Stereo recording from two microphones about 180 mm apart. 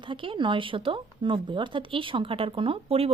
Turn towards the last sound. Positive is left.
turn(degrees=-30)  # may be behind; listen again after turning